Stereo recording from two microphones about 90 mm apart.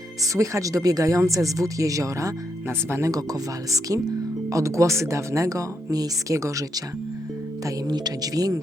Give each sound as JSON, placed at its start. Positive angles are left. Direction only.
{"t": 0.2, "sound": "speech", "side_deg": -35}
{"t": 7.9, "sound": "speech", "side_deg": -50}